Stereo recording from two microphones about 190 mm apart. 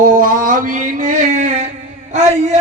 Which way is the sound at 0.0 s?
45° right (ahead or behind).